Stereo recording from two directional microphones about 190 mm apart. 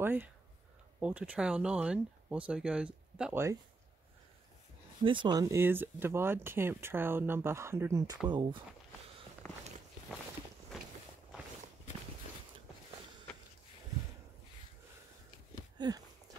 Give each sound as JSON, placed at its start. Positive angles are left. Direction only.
{"t": 0.0, "sound": "speech", "side_deg": -10}
{"t": 5.0, "sound": "speech", "side_deg": -25}
{"t": 9.4, "sound": "walk", "side_deg": 15}
{"t": 15.8, "sound": "speech", "side_deg": -25}